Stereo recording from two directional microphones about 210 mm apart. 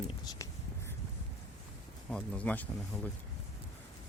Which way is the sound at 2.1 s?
5° left (ahead or behind).